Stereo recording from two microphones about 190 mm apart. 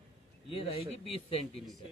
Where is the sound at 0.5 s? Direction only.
30° left (ahead or behind).